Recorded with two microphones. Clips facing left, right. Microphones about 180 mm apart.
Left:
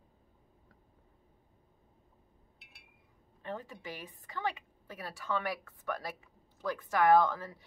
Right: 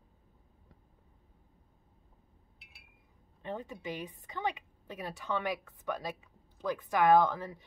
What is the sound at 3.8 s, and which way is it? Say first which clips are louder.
A woman's voice: right 5 dB; 20° right (ahead or behind).